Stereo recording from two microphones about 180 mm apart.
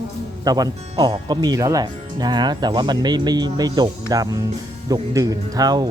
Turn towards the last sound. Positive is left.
turn(degrees=-20)  # may be behind; listen again after turning